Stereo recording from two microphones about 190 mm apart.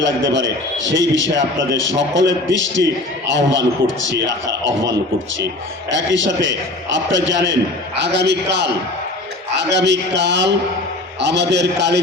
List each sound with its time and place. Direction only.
0.0 s a man's voice: 75° right (ahead or behind)
5.9 s a man's voice: 75° right (ahead or behind)